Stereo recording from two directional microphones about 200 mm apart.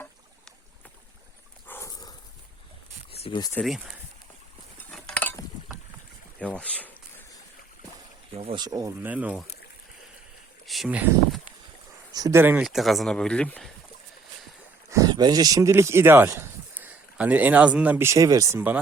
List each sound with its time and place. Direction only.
1.6 s dog: 10° left (ahead or behind)
3.1 s a sound: 30° left (ahead or behind)
3.5 s speech: centre (ahead or behind)
4.8 s chink: 5° left (ahead or behind)
6.4 s speech: 5° left (ahead or behind)
8.4 s speech: 25° right (ahead or behind)
9.0 s speech: 5° right (ahead or behind)
10.7 s speech: 5° right (ahead or behind)
12.1 s speech: 15° right (ahead or behind); by 13.7 s 5° left (ahead or behind)
14.8 s speech: 15° right (ahead or behind)